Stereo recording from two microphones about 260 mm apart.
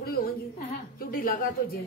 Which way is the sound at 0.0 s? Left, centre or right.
Left.